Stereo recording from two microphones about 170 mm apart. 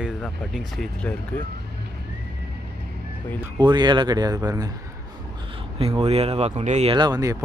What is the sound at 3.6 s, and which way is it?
Speech, 25° right (ahead or behind).